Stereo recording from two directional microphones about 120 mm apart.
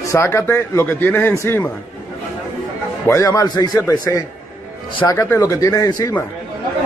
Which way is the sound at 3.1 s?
25° left (ahead or behind).